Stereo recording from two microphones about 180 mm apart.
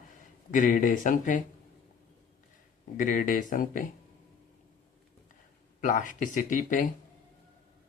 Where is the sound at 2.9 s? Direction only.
45° left (ahead or behind).